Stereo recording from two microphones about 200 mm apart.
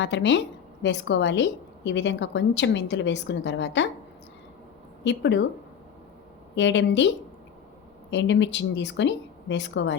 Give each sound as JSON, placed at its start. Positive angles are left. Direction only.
{"t": 0.0, "sound": "a woman's voice", "side_deg": 65}
{"t": 5.0, "sound": "a woman's voice", "side_deg": 60}
{"t": 6.6, "sound": "a woman's voice", "side_deg": 65}
{"t": 8.1, "sound": "a woman's voice", "side_deg": 65}